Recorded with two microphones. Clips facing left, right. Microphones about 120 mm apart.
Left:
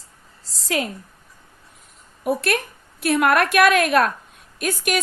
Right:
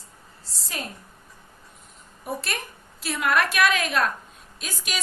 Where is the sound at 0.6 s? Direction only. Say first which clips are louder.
Left 11 dB; 90° left.